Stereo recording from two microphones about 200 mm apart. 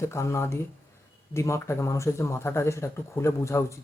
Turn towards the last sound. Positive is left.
turn(degrees=15)  # may be behind; listen again after turning